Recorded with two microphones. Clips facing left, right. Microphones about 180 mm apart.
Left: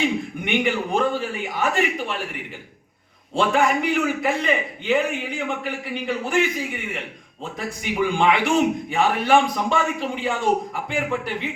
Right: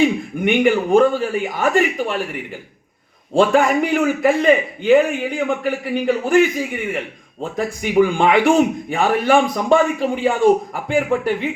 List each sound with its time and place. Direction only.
0.0 s a man's voice: 50° right (ahead or behind)
3.3 s a man's voice: 45° right (ahead or behind)
7.5 s a man's voice: 45° right (ahead or behind)